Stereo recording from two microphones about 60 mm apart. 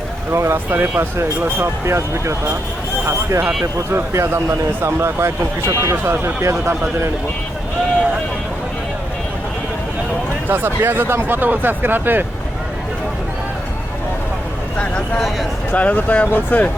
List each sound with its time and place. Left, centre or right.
0.3 s speech: right
3.9 s speech: right
10.5 s speech: right
14.8 s vehicle: centre
15.7 s speech: left